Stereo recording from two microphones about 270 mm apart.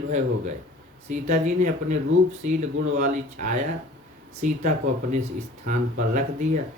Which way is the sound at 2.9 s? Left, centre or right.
Right.